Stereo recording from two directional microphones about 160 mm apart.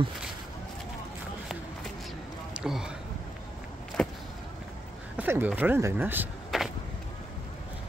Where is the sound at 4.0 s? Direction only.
5° left (ahead or behind).